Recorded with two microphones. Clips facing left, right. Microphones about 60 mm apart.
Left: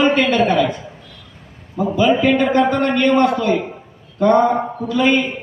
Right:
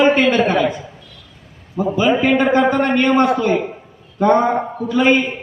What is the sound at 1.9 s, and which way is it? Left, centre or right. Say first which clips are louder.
A man's voice: left 1 dB; centre.